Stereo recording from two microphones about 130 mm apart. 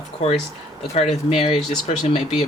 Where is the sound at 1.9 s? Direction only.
60° left (ahead or behind).